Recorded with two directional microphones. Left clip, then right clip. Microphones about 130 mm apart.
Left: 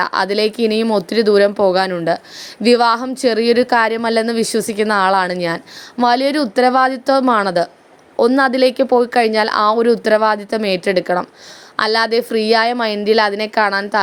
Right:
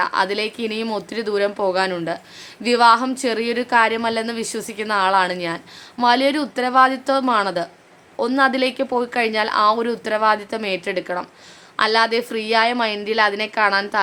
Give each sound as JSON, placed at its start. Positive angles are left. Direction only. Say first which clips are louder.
{"t": 0.0, "sound": "a woman's voice", "louder": "left 4 dB", "side_deg": 50}